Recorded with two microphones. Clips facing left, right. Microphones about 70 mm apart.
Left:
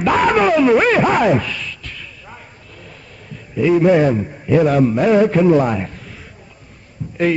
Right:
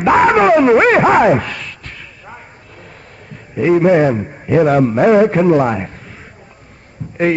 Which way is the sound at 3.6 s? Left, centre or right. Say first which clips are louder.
Right 2 dB; right.